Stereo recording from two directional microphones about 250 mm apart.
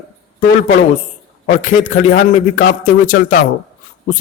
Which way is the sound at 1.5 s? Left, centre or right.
Left.